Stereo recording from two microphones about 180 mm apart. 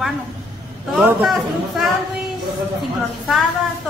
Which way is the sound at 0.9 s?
5° right (ahead or behind).